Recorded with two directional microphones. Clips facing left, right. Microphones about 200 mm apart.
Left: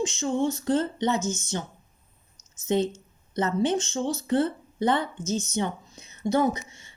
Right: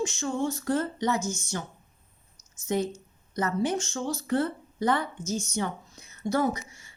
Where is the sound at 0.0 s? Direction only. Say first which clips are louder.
Left 3 dB; 20° left (ahead or behind).